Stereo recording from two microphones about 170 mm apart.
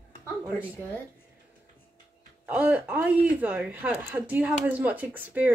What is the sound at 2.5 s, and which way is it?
Speech, 10° right (ahead or behind).